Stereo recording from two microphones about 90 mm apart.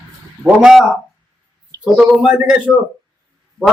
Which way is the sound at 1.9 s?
10° right (ahead or behind).